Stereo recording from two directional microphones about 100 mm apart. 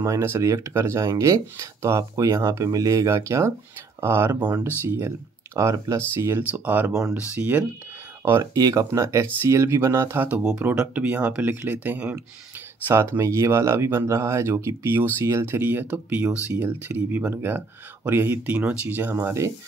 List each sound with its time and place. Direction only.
0.0 s speech: 30° right (ahead or behind)
8.5 s speech: 35° right (ahead or behind); by 19.4 s 20° right (ahead or behind)